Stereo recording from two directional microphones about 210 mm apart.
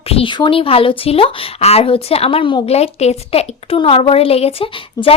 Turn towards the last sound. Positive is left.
turn(degrees=25)  # may be behind; listen again after turning